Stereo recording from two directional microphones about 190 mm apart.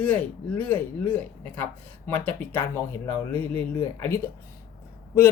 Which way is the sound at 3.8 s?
10° left (ahead or behind).